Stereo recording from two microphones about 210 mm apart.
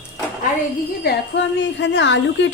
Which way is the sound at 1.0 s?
55° left (ahead or behind).